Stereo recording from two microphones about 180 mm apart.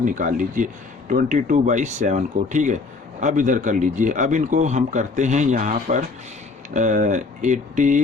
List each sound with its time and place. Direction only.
0.0 s speech: 45° right (ahead or behind)